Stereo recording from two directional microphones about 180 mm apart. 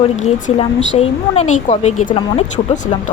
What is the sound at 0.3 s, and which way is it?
Speech, 35° left (ahead or behind).